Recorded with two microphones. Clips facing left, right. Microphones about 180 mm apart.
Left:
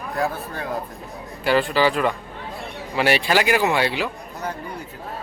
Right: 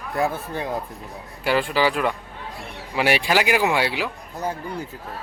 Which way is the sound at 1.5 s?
10° right (ahead or behind).